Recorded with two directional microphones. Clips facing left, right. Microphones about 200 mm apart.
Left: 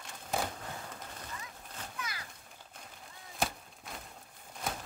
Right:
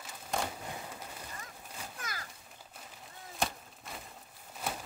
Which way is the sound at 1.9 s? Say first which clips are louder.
Left 2 dB; 45° right (ahead or behind).